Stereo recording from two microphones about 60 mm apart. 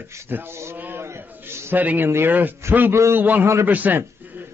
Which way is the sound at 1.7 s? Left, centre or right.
Right.